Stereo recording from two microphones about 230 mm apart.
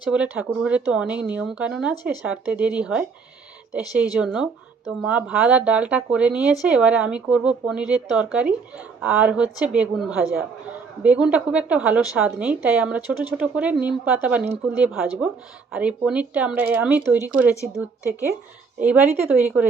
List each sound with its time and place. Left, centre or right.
0.1 s speech: centre
4.1 s a woman's voice: centre
18.9 s a woman's voice: centre